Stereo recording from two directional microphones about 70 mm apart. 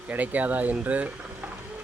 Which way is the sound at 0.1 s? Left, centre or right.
Right.